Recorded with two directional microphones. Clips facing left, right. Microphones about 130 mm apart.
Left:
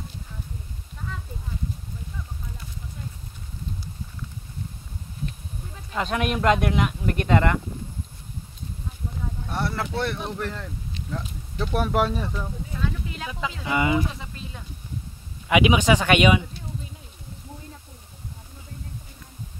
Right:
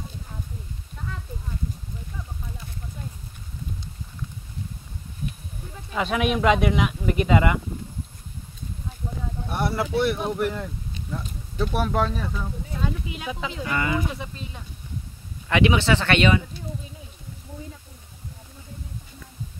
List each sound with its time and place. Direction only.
5.9 s speech: centre (ahead or behind)
9.5 s speech: 15° right (ahead or behind)
11.6 s speech: centre (ahead or behind)
12.7 s a sound: 15° right (ahead or behind)
13.7 s speech: 20° left (ahead or behind)
15.4 s speech: 15° left (ahead or behind)